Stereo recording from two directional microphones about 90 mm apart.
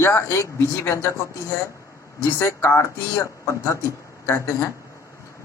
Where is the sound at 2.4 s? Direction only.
30° left (ahead or behind).